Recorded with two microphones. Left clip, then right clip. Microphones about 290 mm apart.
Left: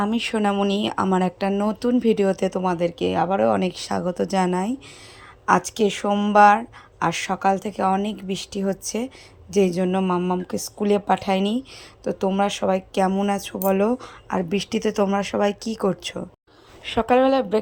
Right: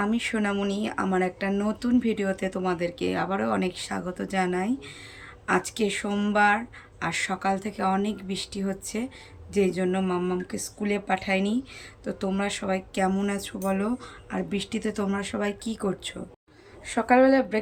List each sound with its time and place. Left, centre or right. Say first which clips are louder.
0.0 s speech: left 5 dB; centre
16.8 s speech: left 2 dB; left